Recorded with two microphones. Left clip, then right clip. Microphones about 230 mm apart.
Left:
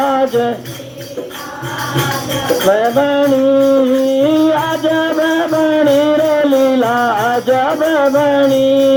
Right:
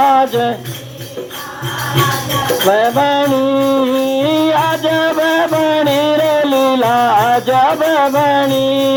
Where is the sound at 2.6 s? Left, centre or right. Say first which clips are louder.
Even; right.